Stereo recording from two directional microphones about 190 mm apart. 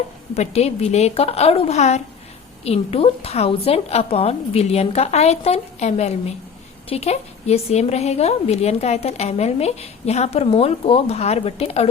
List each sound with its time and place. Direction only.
0.3 s a woman's voice: 35° left (ahead or behind)